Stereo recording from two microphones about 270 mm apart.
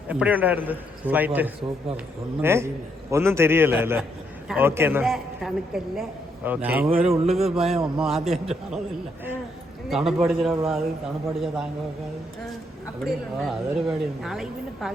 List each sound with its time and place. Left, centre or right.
0.1 s a woman's voice: centre
6.9 s speech: right
7.3 s a woman's voice: centre
9.9 s a woman's voice: centre
13.1 s a woman's voice: centre